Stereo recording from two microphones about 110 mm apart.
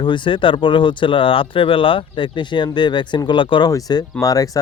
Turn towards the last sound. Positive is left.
turn(degrees=35)  # may be behind; listen again after turning